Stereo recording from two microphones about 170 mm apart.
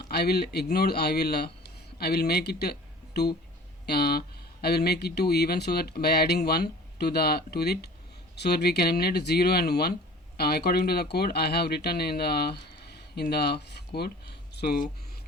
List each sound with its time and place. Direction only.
0.1 s speech: 70° left (ahead or behind)
3.8 s speech: 70° left (ahead or behind)